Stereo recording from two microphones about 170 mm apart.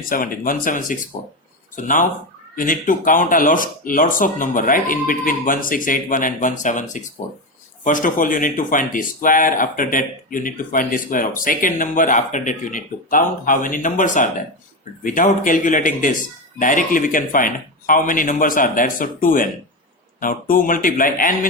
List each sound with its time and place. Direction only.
0.1 s speech: 55° left (ahead or behind)